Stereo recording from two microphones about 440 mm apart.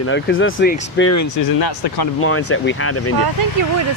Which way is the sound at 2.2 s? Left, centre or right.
Left.